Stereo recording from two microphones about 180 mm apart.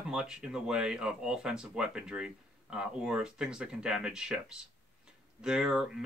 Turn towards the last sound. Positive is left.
turn(degrees=-5)  # may be behind; listen again after turning